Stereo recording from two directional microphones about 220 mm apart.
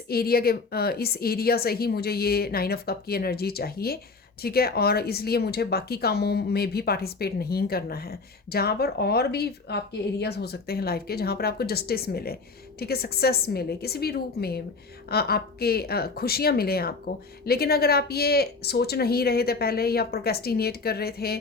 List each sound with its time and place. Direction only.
0.1 s speech: 45° left (ahead or behind)